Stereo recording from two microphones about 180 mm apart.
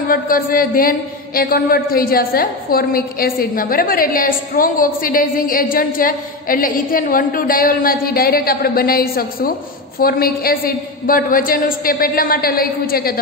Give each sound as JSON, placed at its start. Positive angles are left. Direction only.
{"t": 0.1, "sound": "a man's voice", "side_deg": 50}